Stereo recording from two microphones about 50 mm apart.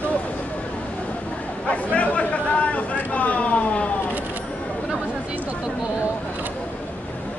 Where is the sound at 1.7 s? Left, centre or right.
Left.